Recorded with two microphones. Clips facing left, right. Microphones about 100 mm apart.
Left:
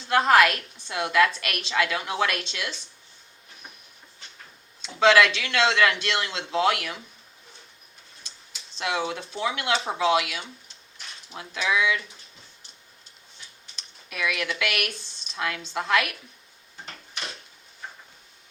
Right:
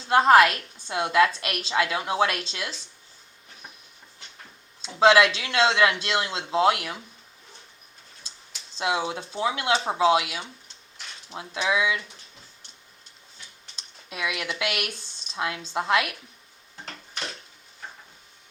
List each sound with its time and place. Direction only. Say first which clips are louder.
0.1 s a woman's voice: right 2 dB; 30° right (ahead or behind)
4.8 s a woman's voice: right 1 dB; 30° right (ahead or behind)
8.8 s a woman's voice: right 1 dB; 25° right (ahead or behind)
13.7 s speech: left 1 dB; 25° right (ahead or behind)